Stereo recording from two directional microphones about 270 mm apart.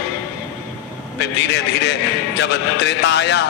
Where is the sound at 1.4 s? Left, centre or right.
Left.